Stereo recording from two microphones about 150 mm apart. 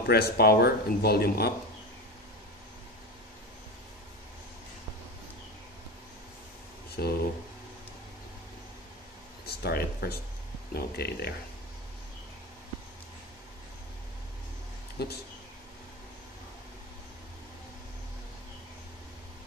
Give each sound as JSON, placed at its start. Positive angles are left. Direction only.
{"t": 0.0, "sound": "speech", "side_deg": 90}
{"t": 7.0, "sound": "speech", "side_deg": 90}
{"t": 9.5, "sound": "speech", "side_deg": 90}
{"t": 15.0, "sound": "speech", "side_deg": 90}